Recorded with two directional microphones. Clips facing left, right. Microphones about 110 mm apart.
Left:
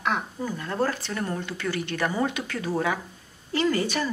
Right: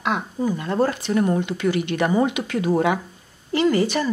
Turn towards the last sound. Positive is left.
turn(degrees=-10)  # may be behind; listen again after turning